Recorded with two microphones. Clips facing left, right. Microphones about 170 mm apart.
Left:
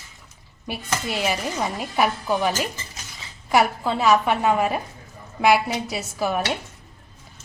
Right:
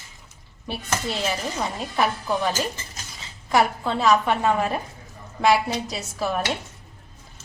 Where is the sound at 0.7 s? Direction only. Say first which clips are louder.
Even; 10° left (ahead or behind).